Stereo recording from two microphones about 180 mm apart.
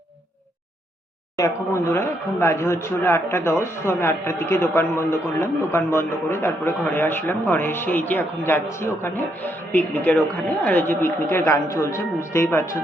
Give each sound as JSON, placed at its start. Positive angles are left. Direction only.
{"t": 1.4, "sound": "speech", "side_deg": 15}